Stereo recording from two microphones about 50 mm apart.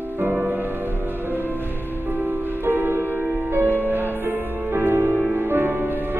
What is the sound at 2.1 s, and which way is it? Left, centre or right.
Music, right.